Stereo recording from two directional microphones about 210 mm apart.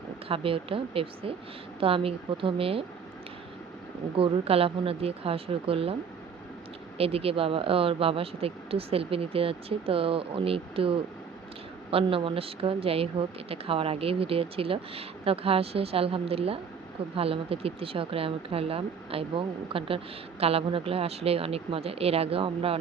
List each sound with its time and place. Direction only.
0.3 s speech: 25° right (ahead or behind)
4.2 s speech: 25° right (ahead or behind)
7.0 s speech: 25° right (ahead or behind)